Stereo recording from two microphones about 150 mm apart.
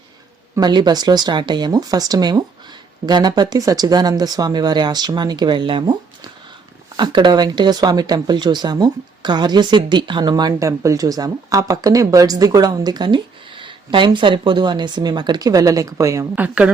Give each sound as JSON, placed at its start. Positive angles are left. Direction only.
{"t": 0.5, "sound": "speech", "side_deg": -30}